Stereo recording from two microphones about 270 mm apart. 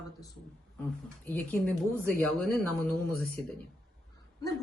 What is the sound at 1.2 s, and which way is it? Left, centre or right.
Speech, centre.